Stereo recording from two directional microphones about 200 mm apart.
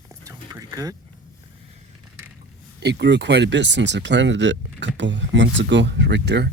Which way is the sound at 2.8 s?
60° right (ahead or behind).